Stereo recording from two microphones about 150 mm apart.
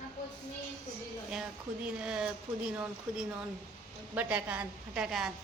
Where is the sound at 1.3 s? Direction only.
5° right (ahead or behind).